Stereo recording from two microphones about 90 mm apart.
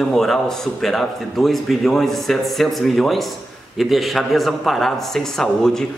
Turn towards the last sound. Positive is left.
turn(degrees=5)  # may be behind; listen again after turning